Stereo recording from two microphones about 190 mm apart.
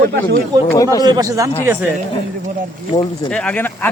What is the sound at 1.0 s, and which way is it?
Speech, 20° right (ahead or behind).